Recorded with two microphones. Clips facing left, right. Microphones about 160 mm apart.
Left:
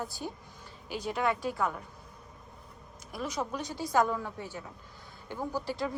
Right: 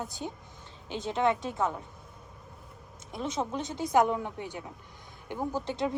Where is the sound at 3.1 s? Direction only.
25° right (ahead or behind).